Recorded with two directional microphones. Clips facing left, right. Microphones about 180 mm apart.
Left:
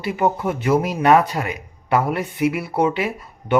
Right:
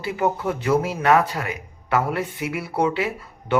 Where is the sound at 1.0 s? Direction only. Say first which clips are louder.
Left 3 dB; 20° left (ahead or behind).